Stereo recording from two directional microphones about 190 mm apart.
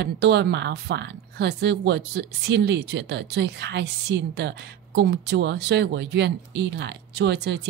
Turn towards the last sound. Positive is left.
turn(degrees=-65)  # may be behind; listen again after turning